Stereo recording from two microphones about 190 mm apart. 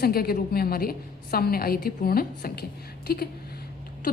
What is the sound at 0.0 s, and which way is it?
A woman's voice, 55° left (ahead or behind).